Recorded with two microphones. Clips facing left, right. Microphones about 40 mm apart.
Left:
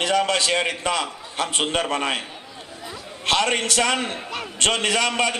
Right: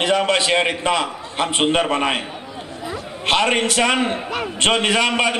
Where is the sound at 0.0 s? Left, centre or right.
Right.